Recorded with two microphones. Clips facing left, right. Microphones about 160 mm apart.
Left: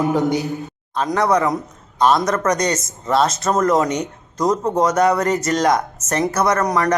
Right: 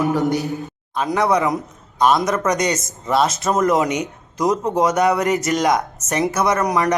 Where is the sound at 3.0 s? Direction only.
5° right (ahead or behind).